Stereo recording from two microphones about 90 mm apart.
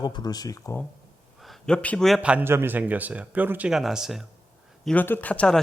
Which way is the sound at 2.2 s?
15° right (ahead or behind).